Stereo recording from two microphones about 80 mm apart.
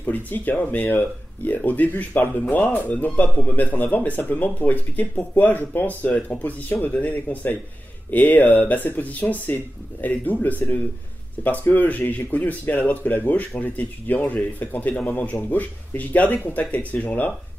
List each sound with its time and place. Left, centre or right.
0.0 s speech: left